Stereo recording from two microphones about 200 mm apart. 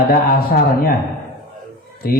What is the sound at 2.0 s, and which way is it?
Speech, 50° left (ahead or behind).